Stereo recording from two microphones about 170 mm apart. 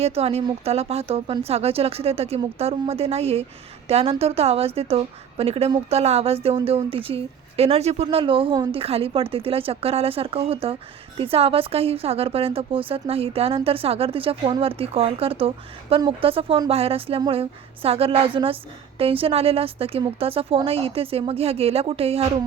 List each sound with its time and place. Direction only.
0.0 s a woman's voice: 35° right (ahead or behind)